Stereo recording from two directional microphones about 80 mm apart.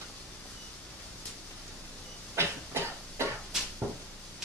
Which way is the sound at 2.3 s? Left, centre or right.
Right.